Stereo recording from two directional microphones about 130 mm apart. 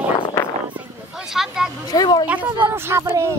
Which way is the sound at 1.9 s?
30° left (ahead or behind).